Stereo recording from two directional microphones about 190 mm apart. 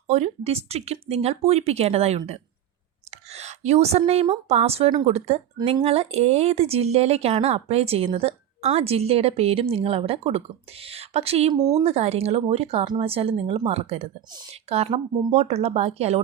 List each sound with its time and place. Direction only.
0.1 s a woman's voice: 35° right (ahead or behind)